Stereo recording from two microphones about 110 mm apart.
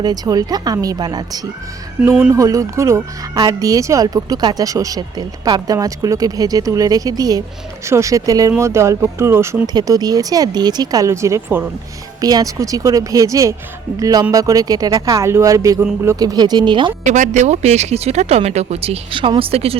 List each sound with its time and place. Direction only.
0.0 s speech: 35° right (ahead or behind)
2.0 s speech: 10° right (ahead or behind)
2.3 s speech: 30° right (ahead or behind)
9.7 s speech: 35° right (ahead or behind); by 11.7 s 20° right (ahead or behind)
12.2 s speech: 35° right (ahead or behind)
17.1 s speech: 90° right; by 19.7 s 60° right (ahead or behind)